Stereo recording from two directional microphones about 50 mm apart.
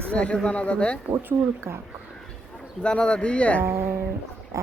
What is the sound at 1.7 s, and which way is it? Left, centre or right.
Speech, right.